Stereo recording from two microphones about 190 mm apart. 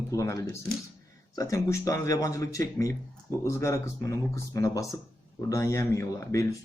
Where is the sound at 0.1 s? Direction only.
15° left (ahead or behind).